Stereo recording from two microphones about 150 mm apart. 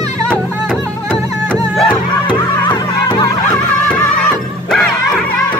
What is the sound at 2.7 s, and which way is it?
Music, 30° left (ahead or behind).